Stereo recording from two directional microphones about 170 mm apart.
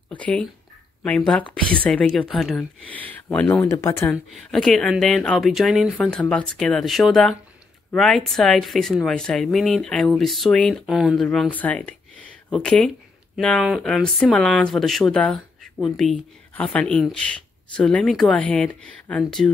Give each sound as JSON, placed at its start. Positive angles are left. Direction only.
{"t": 0.1, "sound": "speech", "side_deg": 10}
{"t": 3.7, "sound": "speech", "side_deg": 20}
{"t": 4.1, "sound": "speech", "side_deg": 0}